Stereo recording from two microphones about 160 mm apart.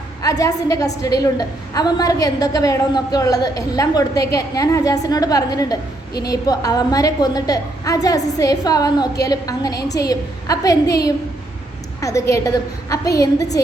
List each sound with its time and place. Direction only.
0.2 s a woman's voice: 20° left (ahead or behind)
11.9 s a sound: 20° left (ahead or behind)
12.3 s a woman's voice: 20° left (ahead or behind)